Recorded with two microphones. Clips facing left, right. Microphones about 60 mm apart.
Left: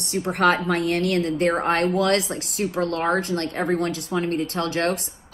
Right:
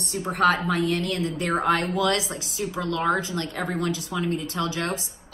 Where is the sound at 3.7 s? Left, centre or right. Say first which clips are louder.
Left 4 dB; left.